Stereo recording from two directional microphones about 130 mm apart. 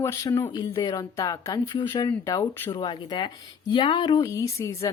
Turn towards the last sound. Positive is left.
turn(degrees=20)  # may be behind; listen again after turning